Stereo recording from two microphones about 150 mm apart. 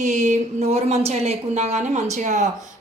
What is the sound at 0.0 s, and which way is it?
Speech, 55° right (ahead or behind).